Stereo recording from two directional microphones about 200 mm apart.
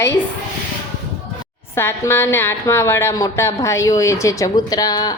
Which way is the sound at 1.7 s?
10° left (ahead or behind).